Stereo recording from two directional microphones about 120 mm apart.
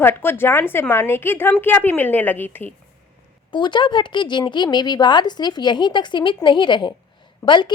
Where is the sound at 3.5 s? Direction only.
40° left (ahead or behind).